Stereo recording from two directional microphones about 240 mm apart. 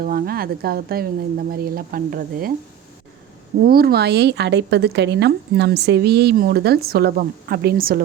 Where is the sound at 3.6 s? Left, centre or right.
Right.